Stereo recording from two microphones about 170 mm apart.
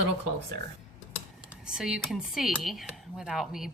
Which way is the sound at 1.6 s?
5° right (ahead or behind).